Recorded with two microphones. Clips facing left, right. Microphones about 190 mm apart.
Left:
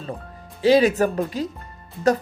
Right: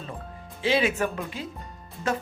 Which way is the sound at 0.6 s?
40° left (ahead or behind).